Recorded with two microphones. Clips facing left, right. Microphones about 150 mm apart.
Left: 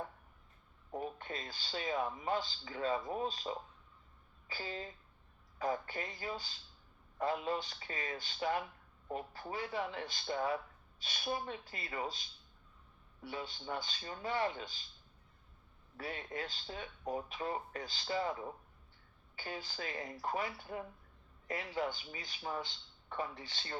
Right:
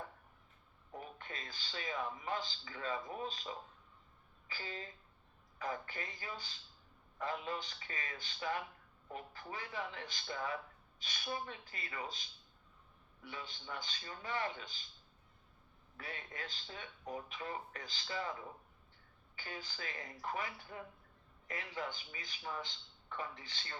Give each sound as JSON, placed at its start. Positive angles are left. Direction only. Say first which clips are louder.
{"t": 0.9, "sound": "speech", "louder": "left 7 dB", "side_deg": 35}
{"t": 13.2, "sound": "speech", "louder": "left 6 dB", "side_deg": 35}
{"t": 16.0, "sound": "speech", "louder": "left 6 dB", "side_deg": 35}
{"t": 19.4, "sound": "speech", "louder": "left 4 dB", "side_deg": 35}